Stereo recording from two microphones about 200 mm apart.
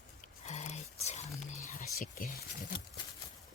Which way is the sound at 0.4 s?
35° left (ahead or behind).